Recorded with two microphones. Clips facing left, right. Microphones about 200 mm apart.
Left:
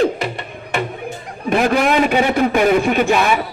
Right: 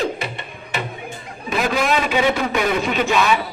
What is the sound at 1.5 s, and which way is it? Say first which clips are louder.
A man's voice: left 5 dB; 55° left (ahead or behind).